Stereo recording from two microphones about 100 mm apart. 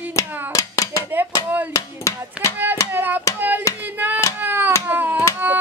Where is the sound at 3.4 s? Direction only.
20° right (ahead or behind).